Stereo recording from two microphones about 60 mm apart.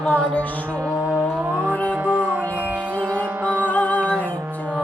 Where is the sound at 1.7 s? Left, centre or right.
Left.